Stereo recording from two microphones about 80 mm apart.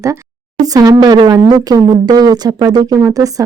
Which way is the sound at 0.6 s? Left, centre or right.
Right.